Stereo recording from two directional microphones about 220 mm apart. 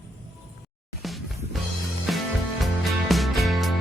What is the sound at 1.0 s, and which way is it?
Music, centre (ahead or behind).